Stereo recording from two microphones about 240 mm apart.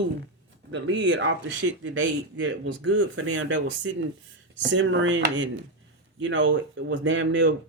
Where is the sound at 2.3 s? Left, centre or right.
Right.